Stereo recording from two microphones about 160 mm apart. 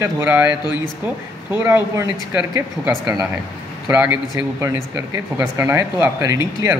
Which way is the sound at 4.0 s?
10° right (ahead or behind).